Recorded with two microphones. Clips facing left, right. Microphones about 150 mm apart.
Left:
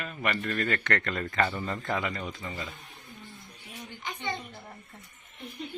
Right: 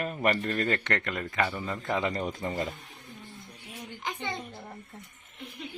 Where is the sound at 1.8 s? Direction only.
20° right (ahead or behind).